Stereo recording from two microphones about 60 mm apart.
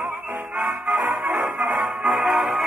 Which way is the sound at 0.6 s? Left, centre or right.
Centre.